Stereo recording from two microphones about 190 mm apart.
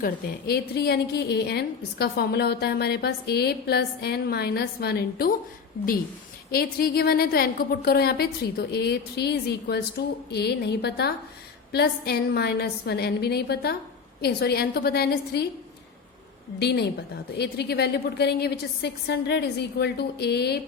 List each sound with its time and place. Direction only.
0.0 s a woman's voice: 55° left (ahead or behind)
6.5 s a woman's voice: 55° left (ahead or behind)
16.6 s a woman's voice: 60° left (ahead or behind)